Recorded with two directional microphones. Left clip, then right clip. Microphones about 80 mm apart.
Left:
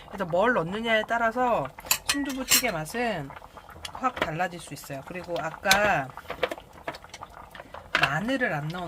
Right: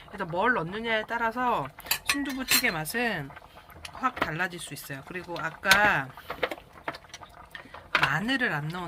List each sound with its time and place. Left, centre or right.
0.2 s speech: left
0.6 s speech: left
1.1 s speech: left
1.4 s speech: left
2.3 s speech: centre
8.1 s speech: centre